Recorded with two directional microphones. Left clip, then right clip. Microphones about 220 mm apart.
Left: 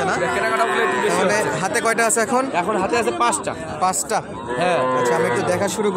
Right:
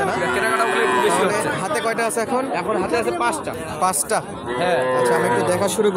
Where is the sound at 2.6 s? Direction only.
40° left (ahead or behind).